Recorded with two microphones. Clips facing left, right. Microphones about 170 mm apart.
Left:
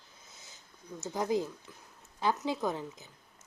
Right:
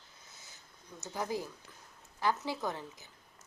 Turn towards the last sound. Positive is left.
turn(degrees=20)  # may be behind; listen again after turning